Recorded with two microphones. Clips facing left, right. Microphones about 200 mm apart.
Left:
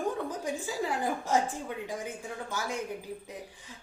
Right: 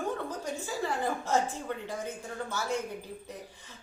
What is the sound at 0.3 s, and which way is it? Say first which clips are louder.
A woman's voice: left 2 dB; 10° left (ahead or behind).